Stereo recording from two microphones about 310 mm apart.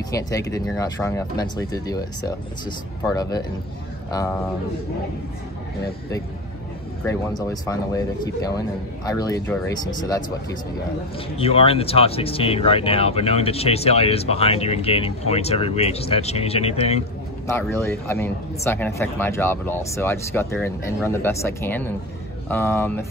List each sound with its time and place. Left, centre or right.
0.1 s speech: centre
7.1 s speech: centre
11.3 s speech: centre
17.5 s speech: centre